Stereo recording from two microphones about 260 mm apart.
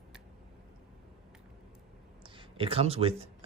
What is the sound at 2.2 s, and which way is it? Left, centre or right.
Speech, right.